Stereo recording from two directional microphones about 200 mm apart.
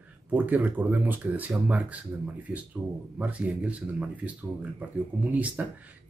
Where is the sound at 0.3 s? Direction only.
10° right (ahead or behind).